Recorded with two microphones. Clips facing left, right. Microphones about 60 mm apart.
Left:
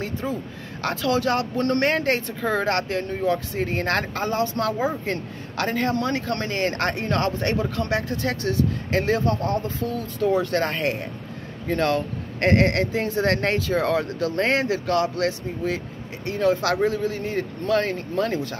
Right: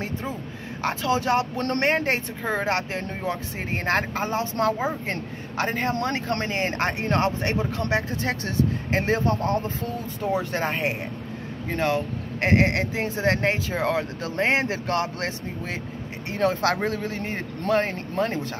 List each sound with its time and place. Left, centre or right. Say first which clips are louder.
0.8 s speech: left 1 dB; right
10.5 s speech: left 2 dB; centre